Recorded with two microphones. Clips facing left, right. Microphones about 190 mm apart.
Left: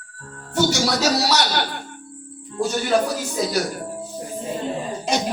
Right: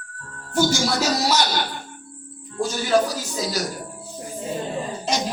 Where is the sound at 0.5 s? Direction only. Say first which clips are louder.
Left 1 dB; 70° left (ahead or behind).